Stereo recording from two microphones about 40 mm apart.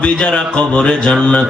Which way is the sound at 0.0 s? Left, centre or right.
Left.